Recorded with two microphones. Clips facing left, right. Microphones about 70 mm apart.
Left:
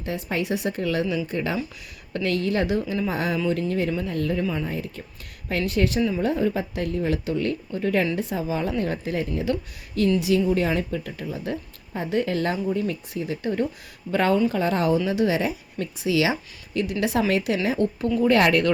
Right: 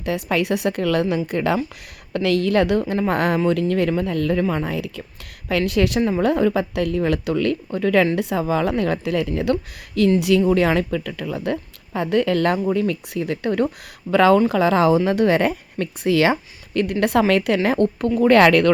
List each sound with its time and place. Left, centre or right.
0.0 s a woman's voice: right
2.1 s a woman's voice: right
5.5 s a woman's voice: right
6.0 s a woman's voice: right
8.1 s a woman's voice: right
14.1 s a woman's voice: right